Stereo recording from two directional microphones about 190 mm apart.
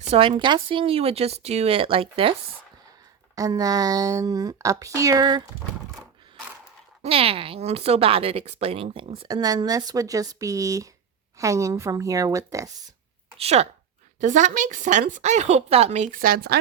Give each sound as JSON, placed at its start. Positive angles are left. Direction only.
{"t": 0.1, "sound": "speech", "side_deg": -25}
{"t": 3.3, "sound": "a woman's voice", "side_deg": -20}
{"t": 7.0, "sound": "a woman's voice", "side_deg": -30}
{"t": 13.4, "sound": "a woman's voice", "side_deg": -35}